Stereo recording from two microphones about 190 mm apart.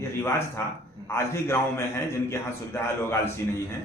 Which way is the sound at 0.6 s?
15° left (ahead or behind).